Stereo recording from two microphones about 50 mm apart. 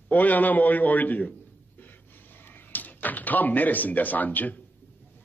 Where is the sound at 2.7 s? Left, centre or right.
Left.